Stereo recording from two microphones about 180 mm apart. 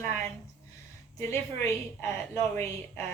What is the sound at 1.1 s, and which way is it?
A woman's voice, 15° left (ahead or behind).